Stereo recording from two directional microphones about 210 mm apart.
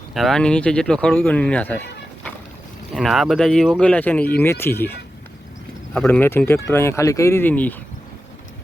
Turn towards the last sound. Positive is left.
turn(degrees=10)  # may be behind; listen again after turning